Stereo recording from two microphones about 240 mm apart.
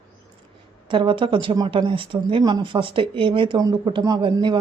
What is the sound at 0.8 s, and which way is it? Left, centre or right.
Speech, right.